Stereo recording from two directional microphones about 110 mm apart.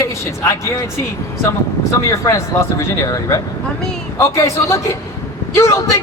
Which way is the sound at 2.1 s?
25° left (ahead or behind).